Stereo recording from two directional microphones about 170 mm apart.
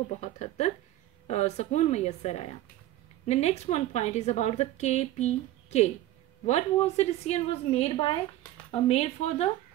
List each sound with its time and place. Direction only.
0.2 s a woman's voice: 40° left (ahead or behind)